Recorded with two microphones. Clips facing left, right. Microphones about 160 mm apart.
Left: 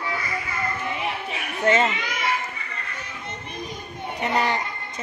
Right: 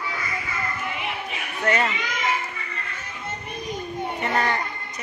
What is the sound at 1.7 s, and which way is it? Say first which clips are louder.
Speech: left 3 dB; 25° left (ahead or behind).